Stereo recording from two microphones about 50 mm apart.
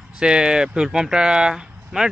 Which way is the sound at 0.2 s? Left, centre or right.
Centre.